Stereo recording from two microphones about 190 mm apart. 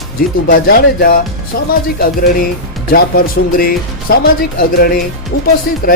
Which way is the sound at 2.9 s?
50° left (ahead or behind).